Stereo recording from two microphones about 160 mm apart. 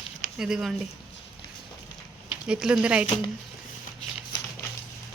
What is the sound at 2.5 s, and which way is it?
Speech, 5° right (ahead or behind).